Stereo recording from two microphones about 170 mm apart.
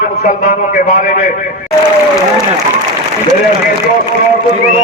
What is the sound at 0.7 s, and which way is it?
Speech, 50° left (ahead or behind).